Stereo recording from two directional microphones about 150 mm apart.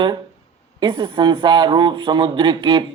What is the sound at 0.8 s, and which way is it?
Speech, 30° right (ahead or behind).